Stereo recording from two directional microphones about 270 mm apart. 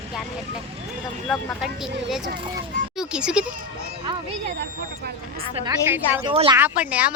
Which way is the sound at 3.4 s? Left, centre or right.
Right.